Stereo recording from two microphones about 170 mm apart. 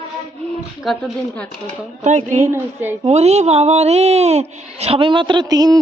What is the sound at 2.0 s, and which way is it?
Speech, 45° right (ahead or behind).